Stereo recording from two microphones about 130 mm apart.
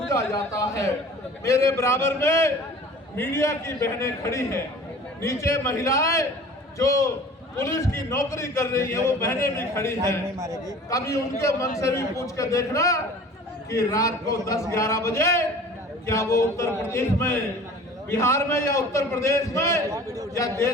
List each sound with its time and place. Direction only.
0.1 s a man's voice: 20° left (ahead or behind)
10.3 s a man's voice: 25° right (ahead or behind)
10.8 s a man's voice: 25° left (ahead or behind)